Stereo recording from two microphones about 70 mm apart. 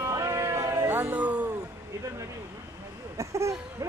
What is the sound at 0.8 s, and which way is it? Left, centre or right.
Music, right.